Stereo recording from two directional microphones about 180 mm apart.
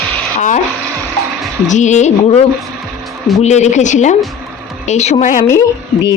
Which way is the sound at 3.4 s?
40° left (ahead or behind).